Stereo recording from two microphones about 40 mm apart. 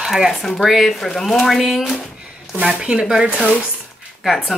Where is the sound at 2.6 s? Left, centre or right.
Right.